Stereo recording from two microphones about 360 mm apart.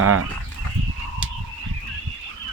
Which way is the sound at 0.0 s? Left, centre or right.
Right.